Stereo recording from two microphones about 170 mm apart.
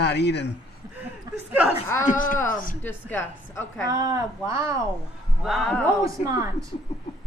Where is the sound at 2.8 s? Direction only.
10° left (ahead or behind).